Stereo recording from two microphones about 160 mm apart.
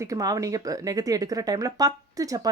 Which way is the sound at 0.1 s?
20° right (ahead or behind).